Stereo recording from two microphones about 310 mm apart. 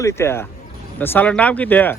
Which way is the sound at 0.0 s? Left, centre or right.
Centre.